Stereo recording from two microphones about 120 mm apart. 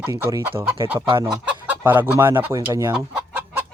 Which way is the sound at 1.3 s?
10° right (ahead or behind).